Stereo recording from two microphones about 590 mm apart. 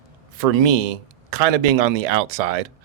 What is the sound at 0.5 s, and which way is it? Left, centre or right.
Speech, right.